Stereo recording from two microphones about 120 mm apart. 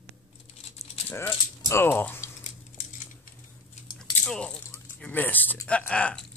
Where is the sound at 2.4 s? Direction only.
80° left.